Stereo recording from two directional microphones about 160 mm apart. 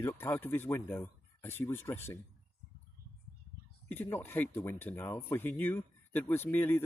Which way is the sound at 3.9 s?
15° left (ahead or behind).